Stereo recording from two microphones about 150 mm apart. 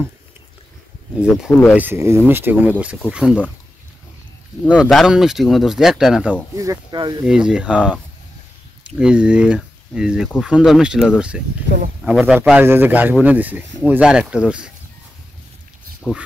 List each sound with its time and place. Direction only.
1.2 s speech: 5° right (ahead or behind)
1.8 s speech: 15° right (ahead or behind)
4.6 s speech: centre (ahead or behind)
6.5 s speech: 20° right (ahead or behind)
7.2 s speech: 5° right (ahead or behind)
9.0 s speech: 5° right (ahead or behind)